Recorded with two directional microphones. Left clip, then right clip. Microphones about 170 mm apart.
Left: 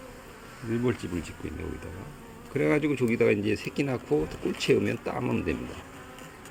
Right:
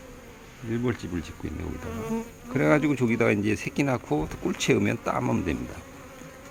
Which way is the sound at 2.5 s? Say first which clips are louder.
Right 3 dB; 20° right (ahead or behind).